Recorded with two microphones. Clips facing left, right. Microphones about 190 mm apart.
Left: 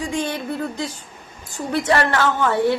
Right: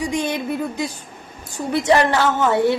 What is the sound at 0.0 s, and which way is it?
A woman's voice, 15° right (ahead or behind).